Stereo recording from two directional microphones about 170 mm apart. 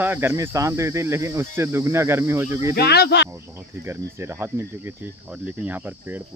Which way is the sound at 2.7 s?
70° left (ahead or behind).